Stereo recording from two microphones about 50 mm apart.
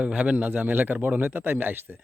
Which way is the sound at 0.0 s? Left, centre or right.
Right.